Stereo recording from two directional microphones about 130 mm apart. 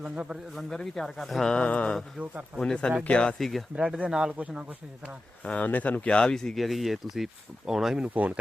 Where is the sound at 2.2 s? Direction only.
10° right (ahead or behind).